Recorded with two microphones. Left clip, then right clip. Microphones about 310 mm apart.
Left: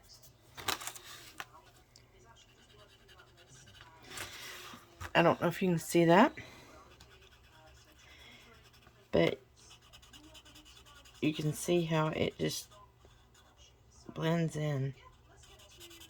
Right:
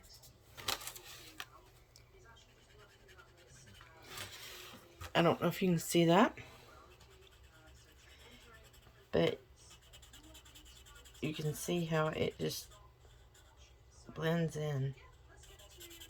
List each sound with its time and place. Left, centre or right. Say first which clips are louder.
5.0 s speech: left 4 dB; centre
9.0 s a sound: left 3 dB; left
11.2 s speech: left 6 dB; centre
14.1 s speech: left 2 dB; left